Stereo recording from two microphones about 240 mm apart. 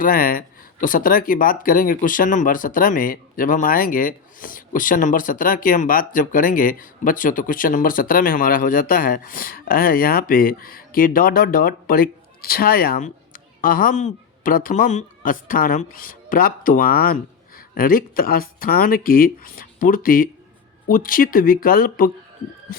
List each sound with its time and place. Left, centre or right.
0.0 s speech: left